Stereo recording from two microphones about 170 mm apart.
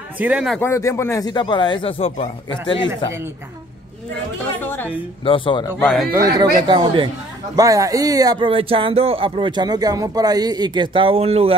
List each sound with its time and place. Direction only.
0.2 s a man's voice: 5° right (ahead or behind)
0.6 s speech: 15° left (ahead or behind); by 2.9 s 30° left (ahead or behind)
4.6 s a woman's voice: 10° left (ahead or behind)
5.2 s a man's voice: 30° left (ahead or behind)
5.8 s a man's voice: centre (ahead or behind)
6.1 s speech: 20° right (ahead or behind)